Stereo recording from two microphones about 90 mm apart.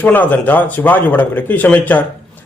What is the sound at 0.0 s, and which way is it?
A man's voice, 20° left (ahead or behind).